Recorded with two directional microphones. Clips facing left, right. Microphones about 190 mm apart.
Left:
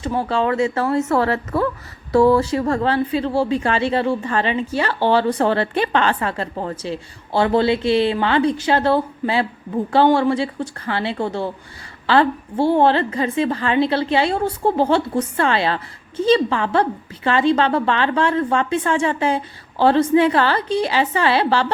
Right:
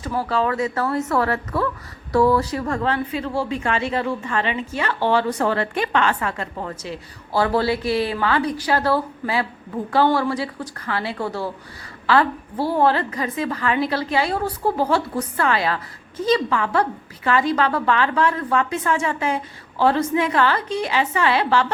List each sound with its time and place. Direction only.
0.0 s a woman's voice: 25° left (ahead or behind)